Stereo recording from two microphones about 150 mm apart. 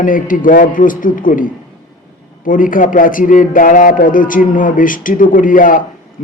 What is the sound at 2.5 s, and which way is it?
A man's voice, 65° left (ahead or behind).